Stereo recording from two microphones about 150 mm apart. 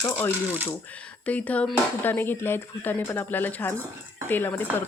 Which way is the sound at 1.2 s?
10° left (ahead or behind).